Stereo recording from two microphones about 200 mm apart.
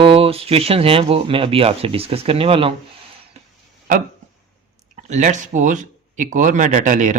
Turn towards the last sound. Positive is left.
turn(degrees=-40)  # may be behind; listen again after turning